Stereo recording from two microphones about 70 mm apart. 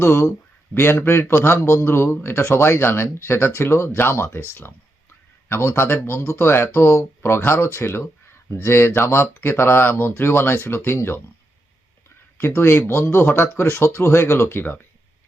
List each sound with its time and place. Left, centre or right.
0.0 s speech: left
12.4 s speech: left